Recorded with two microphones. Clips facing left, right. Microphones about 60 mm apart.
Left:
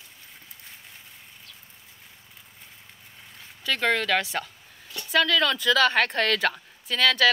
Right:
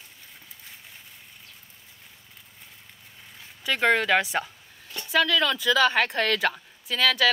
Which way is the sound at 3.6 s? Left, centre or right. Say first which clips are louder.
Right 2 dB; centre.